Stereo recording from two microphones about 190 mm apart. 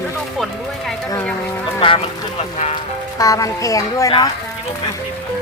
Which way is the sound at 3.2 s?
20° left (ahead or behind).